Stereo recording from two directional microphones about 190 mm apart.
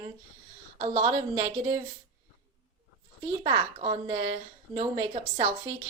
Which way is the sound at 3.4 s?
25° right (ahead or behind).